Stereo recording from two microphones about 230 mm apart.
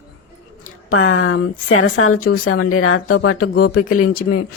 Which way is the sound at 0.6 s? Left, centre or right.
Left.